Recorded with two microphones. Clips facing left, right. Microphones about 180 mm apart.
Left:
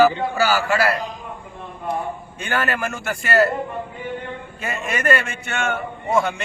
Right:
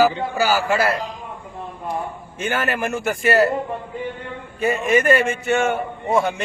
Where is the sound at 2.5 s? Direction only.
15° right (ahead or behind).